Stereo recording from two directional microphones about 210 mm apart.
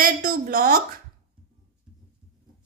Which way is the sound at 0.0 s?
40° right (ahead or behind).